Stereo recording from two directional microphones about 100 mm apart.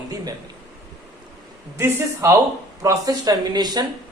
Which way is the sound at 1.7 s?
30° right (ahead or behind).